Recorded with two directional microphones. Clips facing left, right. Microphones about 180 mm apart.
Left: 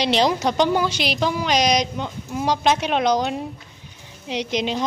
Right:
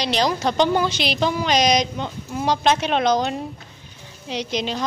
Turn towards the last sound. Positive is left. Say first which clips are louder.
# left 2 dB
turn(degrees=20)  # may be behind; listen again after turning